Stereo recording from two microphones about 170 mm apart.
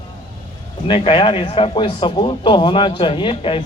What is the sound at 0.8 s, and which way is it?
A man's voice, 30° left (ahead or behind).